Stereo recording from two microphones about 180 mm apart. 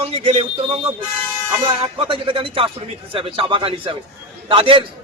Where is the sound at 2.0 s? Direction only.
30° right (ahead or behind).